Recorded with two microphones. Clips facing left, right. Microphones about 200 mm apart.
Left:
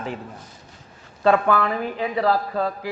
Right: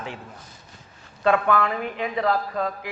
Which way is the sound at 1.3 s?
35° left (ahead or behind).